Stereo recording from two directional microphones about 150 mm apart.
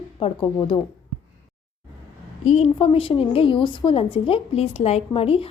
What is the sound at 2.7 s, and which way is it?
A woman's voice, 35° left (ahead or behind).